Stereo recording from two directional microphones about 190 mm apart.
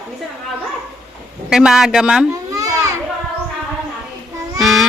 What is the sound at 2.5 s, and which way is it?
Children playing, 20° right (ahead or behind).